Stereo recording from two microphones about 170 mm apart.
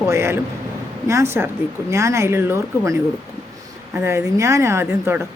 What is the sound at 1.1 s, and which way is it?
A woman's voice, 15° right (ahead or behind).